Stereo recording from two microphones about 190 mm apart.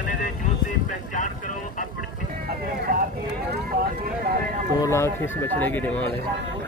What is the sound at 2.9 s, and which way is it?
Run, 45° right (ahead or behind).